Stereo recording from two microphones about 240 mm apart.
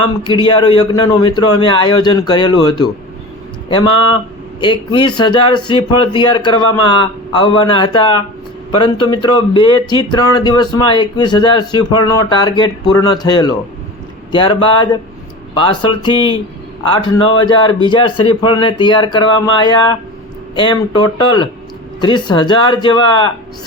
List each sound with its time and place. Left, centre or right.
0.3 s a man's voice: centre